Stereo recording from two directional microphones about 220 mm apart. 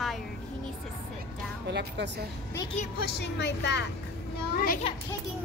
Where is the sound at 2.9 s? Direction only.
45° left (ahead or behind).